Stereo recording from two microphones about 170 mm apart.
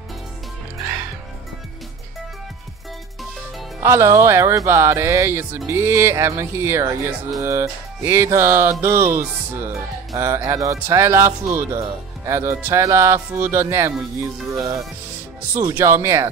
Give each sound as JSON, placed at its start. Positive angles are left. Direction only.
{"t": 3.8, "sound": "speech", "side_deg": -15}
{"t": 15.6, "sound": "speech", "side_deg": -15}